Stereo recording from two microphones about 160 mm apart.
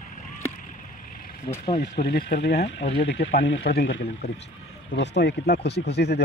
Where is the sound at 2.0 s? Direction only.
90° left.